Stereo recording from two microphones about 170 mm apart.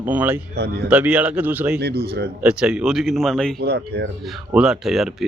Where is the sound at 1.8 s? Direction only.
70° right (ahead or behind).